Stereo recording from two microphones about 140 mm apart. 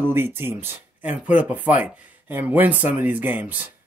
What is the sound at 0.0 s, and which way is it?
Speech, 15° right (ahead or behind).